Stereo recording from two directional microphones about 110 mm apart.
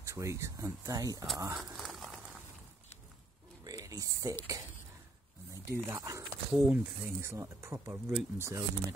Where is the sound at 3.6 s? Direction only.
35° right (ahead or behind).